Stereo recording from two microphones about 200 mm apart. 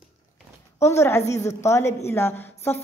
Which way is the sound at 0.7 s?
15° left (ahead or behind).